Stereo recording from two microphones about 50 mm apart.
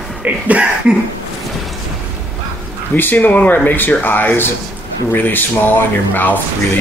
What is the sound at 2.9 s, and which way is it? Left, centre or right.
Speech, left.